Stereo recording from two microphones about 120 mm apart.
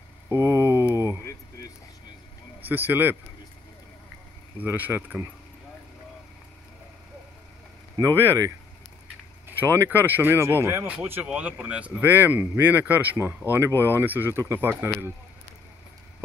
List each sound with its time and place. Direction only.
0.3 s a sound: 20° right (ahead or behind)
2.6 s speech: 15° right (ahead or behind)
4.6 s speech: 15° right (ahead or behind)
8.0 s speech: 25° right (ahead or behind)
9.6 s speech: 20° right (ahead or behind)